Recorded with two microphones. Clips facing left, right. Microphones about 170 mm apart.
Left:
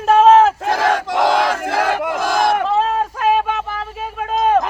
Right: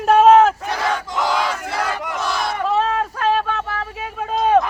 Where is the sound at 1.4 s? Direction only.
50° left (ahead or behind).